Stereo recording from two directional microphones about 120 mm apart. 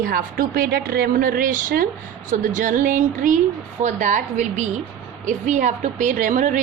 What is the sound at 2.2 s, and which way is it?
A woman's voice, 90° right.